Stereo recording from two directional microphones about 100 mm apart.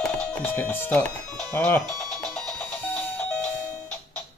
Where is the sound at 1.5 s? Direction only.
20° left (ahead or behind).